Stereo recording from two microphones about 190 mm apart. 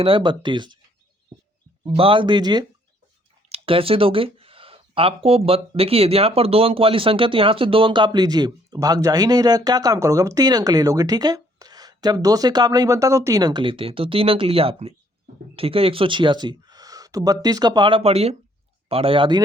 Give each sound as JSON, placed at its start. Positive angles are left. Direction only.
{"t": 0.0, "sound": "speech", "side_deg": -25}
{"t": 1.8, "sound": "speech", "side_deg": -25}